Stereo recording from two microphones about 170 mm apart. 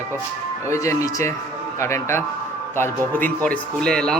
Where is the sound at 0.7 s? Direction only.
15° left (ahead or behind).